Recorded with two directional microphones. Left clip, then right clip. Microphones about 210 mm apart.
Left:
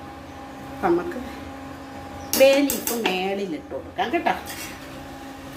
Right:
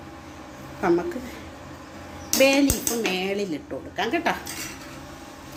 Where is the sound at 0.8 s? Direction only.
20° right (ahead or behind).